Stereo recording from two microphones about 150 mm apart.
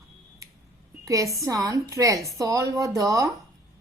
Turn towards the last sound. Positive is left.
turn(degrees=-20)  # may be behind; listen again after turning